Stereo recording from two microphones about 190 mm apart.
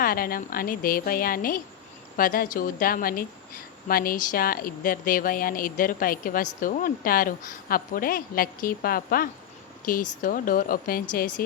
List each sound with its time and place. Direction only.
0.0 s a woman's voice: 50° left (ahead or behind)